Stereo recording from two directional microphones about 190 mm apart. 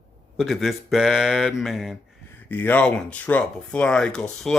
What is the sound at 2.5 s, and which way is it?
Speech, 10° left (ahead or behind).